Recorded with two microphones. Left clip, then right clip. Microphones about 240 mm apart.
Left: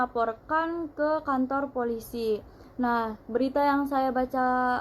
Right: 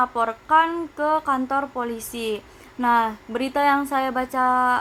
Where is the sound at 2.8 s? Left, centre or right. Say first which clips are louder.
Right 8 dB; right.